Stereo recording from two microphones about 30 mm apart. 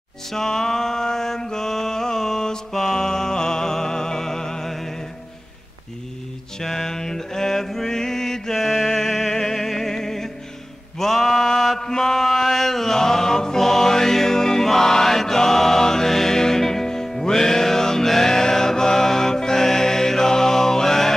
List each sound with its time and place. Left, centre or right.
0.3 s mantra: centre
6.6 s mantra: centre
12.0 s chant: centre
13.6 s music: centre